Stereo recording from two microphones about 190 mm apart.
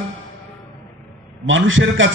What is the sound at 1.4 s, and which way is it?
Speech, 90° right.